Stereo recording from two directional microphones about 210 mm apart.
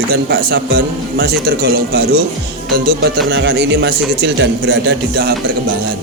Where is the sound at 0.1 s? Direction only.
50° right (ahead or behind).